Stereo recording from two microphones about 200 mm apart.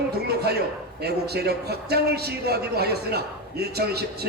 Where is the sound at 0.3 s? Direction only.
55° right (ahead or behind).